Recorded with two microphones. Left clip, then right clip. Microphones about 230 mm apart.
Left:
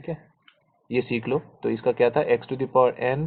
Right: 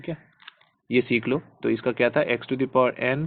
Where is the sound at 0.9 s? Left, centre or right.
Right.